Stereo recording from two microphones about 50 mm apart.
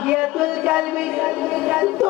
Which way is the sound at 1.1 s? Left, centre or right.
Centre.